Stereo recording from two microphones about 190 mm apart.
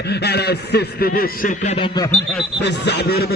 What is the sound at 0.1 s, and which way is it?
Speech, 60° left (ahead or behind).